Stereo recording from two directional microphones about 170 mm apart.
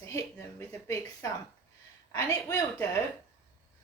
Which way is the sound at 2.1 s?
15° left (ahead or behind).